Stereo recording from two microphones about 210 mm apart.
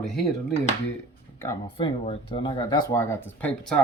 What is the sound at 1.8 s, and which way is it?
Speech, 25° left (ahead or behind).